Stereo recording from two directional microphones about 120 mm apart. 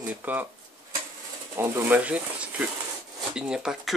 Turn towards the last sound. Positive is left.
turn(degrees=-5)  # may be behind; listen again after turning